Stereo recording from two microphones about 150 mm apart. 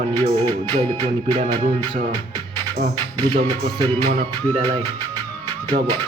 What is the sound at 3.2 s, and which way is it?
Speech, 30° right (ahead or behind).